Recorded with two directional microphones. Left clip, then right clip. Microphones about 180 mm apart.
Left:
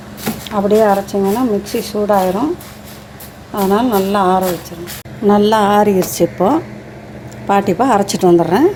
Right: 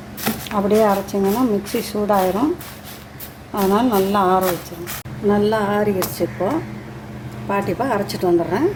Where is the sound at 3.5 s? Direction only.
20° left (ahead or behind).